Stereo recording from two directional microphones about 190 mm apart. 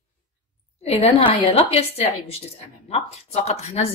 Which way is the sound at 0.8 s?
30° left (ahead or behind).